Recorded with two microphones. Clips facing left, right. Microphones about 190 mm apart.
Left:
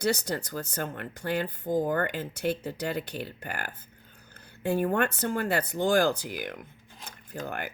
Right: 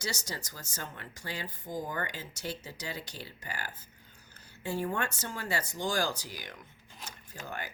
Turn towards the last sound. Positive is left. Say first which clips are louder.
# left 6 dB
turn(degrees=55)  # may be behind; listen again after turning